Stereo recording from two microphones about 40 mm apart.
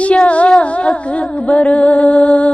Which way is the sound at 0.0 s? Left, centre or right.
Left.